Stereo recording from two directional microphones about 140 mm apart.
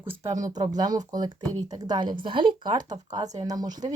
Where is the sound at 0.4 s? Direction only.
30° right (ahead or behind).